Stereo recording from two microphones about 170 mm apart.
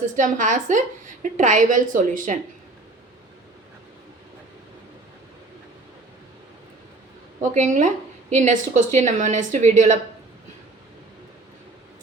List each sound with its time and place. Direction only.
0.2 s a woman's voice: 50° right (ahead or behind)
7.5 s a woman's voice: 45° right (ahead or behind)